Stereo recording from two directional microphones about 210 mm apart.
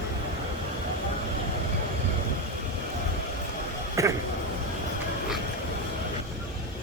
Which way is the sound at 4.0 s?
15° right (ahead or behind).